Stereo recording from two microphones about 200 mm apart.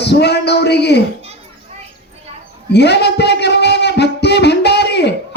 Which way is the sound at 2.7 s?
55° left (ahead or behind).